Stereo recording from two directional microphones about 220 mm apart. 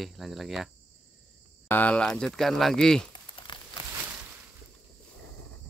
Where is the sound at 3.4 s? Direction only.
20° left (ahead or behind).